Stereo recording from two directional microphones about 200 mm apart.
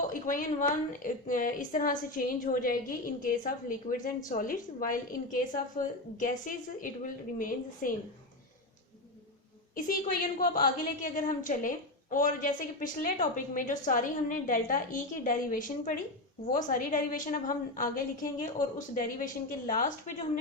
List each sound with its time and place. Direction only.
0.1 s a sound: 45° left (ahead or behind)
0.9 s a woman's voice: 40° left (ahead or behind)
9.7 s a woman's voice: 45° left (ahead or behind)